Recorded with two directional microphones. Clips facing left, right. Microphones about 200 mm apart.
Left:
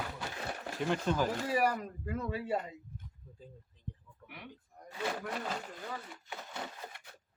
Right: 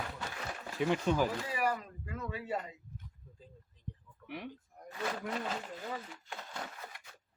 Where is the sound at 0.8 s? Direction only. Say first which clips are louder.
Right 2 dB; 5° right (ahead or behind).